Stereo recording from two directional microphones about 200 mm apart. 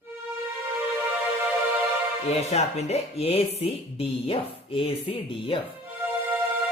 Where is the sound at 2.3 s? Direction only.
30° left (ahead or behind).